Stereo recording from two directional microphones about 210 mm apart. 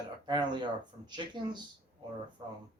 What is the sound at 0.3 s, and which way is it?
A man's voice, 20° right (ahead or behind).